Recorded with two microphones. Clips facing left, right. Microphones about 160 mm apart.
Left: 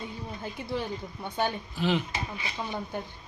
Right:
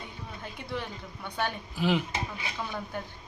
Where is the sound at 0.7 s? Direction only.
30° left (ahead or behind).